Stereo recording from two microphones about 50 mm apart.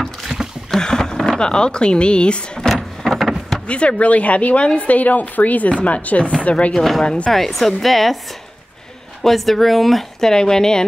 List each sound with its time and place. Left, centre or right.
0.7 s speech: centre
2.6 s vehicle: centre
3.6 s speech: left
6.7 s speech: centre
9.2 s speech: centre